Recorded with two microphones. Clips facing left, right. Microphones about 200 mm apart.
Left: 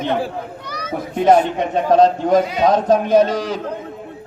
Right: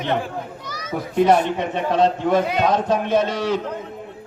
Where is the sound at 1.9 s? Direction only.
40° left (ahead or behind).